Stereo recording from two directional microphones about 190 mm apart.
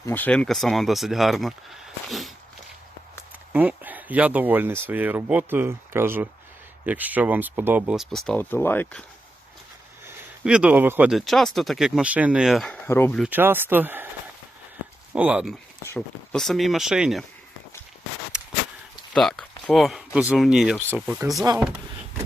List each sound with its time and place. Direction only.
0.0 s speech: 10° left (ahead or behind)
3.5 s speech: 10° right (ahead or behind); by 9.0 s 10° left (ahead or behind)
10.1 s speech: 5° right (ahead or behind)
12.8 s speech: 10° left (ahead or behind)
13.3 s speech: 10° right (ahead or behind)
15.1 s speech: 5° right (ahead or behind)
15.8 s speech: 10° left (ahead or behind)
19.1 s speech: 5° left (ahead or behind); by 21.6 s 20° right (ahead or behind)